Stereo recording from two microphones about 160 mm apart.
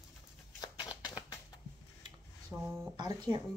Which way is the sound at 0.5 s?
25° left (ahead or behind).